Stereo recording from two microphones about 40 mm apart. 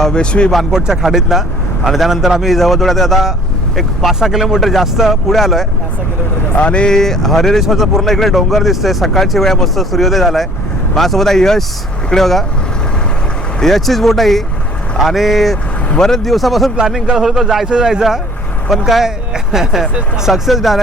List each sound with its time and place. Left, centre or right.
0.0 s speech: left
0.7 s speech: centre
6.6 s speech: left
6.9 s speech: centre
13.6 s speech: centre
16.0 s speech: centre
17.7 s speech: right
18.7 s speech: centre